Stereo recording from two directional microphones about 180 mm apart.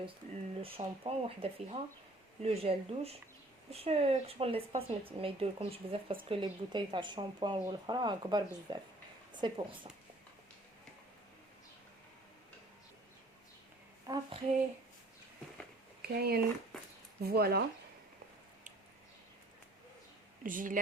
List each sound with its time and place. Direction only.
0.6 s a woman's voice: 30° right (ahead or behind)
14.1 s a sound: 15° right (ahead or behind)
16.0 s speech: 60° right (ahead or behind)
16.7 s a sound: centre (ahead or behind)
17.2 s speech: 60° right (ahead or behind)
20.4 s speech: 50° right (ahead or behind)